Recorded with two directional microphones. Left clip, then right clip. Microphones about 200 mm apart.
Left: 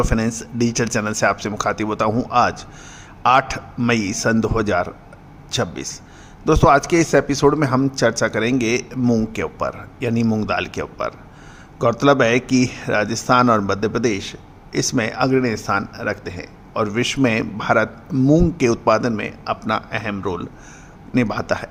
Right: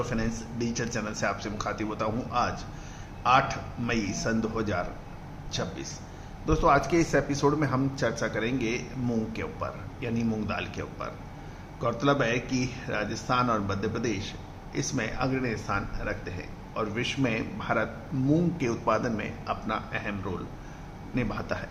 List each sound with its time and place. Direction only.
0.0 s a man's voice: 60° left (ahead or behind)